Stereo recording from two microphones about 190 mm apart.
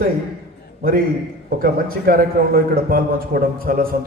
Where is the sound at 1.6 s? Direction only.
50° right (ahead or behind).